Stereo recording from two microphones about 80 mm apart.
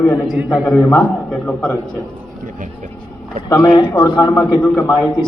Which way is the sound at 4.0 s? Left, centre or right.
Left.